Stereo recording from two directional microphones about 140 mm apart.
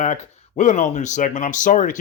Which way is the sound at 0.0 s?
60° left (ahead or behind).